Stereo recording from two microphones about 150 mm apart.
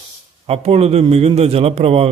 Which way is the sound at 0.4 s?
40° right (ahead or behind).